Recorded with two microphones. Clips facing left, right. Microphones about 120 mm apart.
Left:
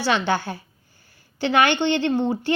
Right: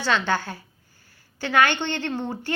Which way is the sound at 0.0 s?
15° left (ahead or behind).